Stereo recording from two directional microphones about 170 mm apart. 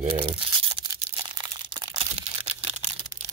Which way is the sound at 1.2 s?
25° right (ahead or behind).